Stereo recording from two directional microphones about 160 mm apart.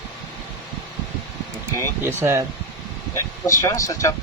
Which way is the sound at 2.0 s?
15° right (ahead or behind).